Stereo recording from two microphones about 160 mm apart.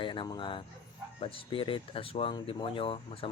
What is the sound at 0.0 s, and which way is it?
Speech, 30° left (ahead or behind).